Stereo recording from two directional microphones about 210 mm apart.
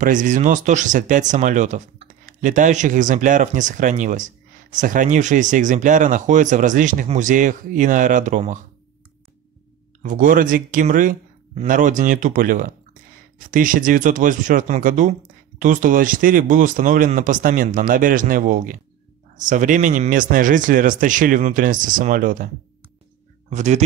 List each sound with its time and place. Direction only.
0.0 s speech: 40° right (ahead or behind)
10.0 s speech: 40° right (ahead or behind)
23.5 s speech: 35° right (ahead or behind)